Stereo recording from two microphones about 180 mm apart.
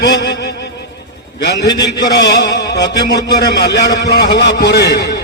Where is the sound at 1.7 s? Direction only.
20° left (ahead or behind).